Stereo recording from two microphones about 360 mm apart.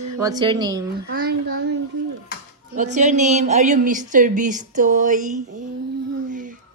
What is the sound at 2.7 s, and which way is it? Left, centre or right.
A woman's voice, centre.